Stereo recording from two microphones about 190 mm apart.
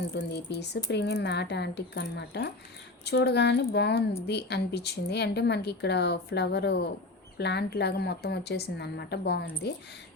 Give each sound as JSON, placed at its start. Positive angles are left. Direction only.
{"t": 0.1, "sound": "a woman's voice", "side_deg": 60}